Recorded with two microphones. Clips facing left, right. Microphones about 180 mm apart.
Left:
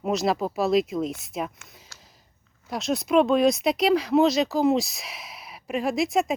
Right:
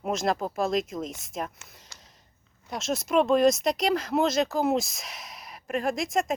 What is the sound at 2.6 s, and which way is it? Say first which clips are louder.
Speech: left 4 dB; centre (ahead or behind).